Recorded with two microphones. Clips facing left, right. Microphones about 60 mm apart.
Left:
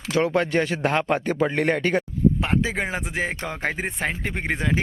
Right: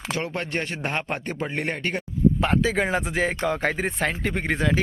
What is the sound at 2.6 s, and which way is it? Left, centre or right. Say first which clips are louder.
Speech: right 2 dB; centre.